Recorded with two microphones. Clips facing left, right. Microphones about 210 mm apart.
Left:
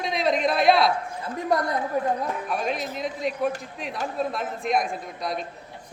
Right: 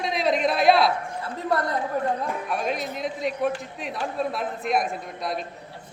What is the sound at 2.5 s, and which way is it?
A man's voice, centre (ahead or behind).